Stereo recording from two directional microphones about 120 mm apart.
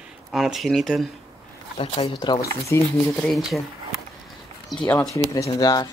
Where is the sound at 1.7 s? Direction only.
55° left (ahead or behind).